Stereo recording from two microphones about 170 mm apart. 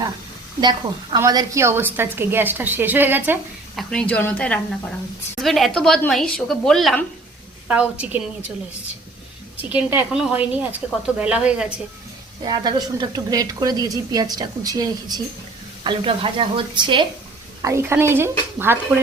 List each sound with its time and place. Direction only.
0.6 s a woman's voice: 25° right (ahead or behind)
3.8 s a woman's voice: 5° left (ahead or behind)
9.6 s a woman's voice: 10° right (ahead or behind)
12.5 s speech: 25° right (ahead or behind)
17.6 s a woman's voice: 15° right (ahead or behind)